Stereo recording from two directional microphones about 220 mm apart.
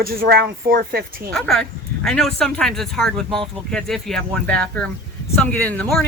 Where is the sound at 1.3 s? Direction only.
5° left (ahead or behind).